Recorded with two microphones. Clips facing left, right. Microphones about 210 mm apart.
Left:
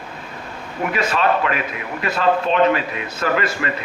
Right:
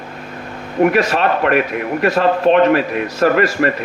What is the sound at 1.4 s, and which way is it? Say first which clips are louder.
A man's voice: right 7 dB; 60° right (ahead or behind).